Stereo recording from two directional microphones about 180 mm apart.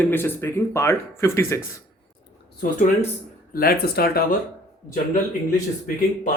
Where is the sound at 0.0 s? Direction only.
10° left (ahead or behind).